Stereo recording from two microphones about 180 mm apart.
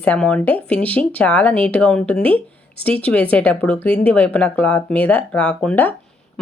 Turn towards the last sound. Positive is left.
turn(degrees=10)  # may be behind; listen again after turning